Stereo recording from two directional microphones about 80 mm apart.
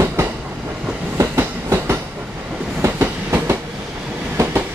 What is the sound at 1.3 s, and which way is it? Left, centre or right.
Train, right.